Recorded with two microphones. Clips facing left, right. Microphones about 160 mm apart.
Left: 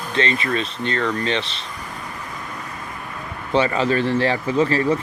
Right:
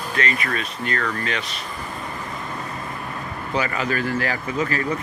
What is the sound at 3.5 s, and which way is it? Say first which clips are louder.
Speech: left 6 dB; 30° left (ahead or behind).